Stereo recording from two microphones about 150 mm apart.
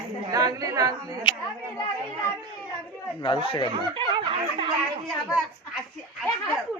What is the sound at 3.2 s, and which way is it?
Speech, 35° left (ahead or behind).